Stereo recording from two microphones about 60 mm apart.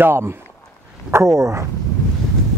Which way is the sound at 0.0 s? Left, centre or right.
Right.